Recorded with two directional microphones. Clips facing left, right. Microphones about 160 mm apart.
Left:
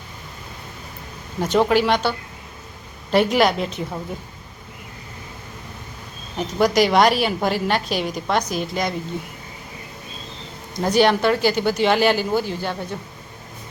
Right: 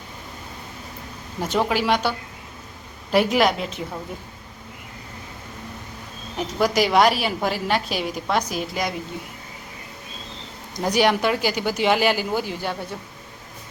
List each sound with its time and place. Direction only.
1.4 s a woman's voice: 5° right (ahead or behind)
6.3 s a woman's voice: 5° right (ahead or behind)
10.8 s speech: 15° right (ahead or behind)